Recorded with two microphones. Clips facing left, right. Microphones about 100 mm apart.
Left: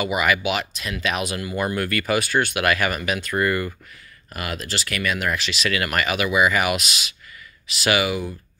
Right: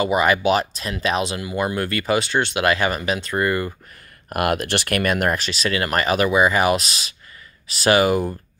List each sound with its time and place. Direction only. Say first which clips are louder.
0.0 s speech: right 4 dB; 30° right (ahead or behind)
4.3 s speech: right 9 dB; 55° right (ahead or behind)
5.3 s speech: right 2 dB; 35° right (ahead or behind)